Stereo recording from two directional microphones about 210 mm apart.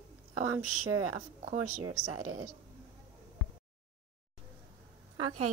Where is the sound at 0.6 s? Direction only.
90° right.